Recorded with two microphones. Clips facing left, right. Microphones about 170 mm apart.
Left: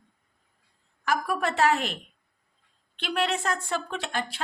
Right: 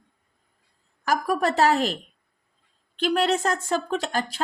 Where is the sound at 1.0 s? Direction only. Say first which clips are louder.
Right 4 dB; 40° right (ahead or behind).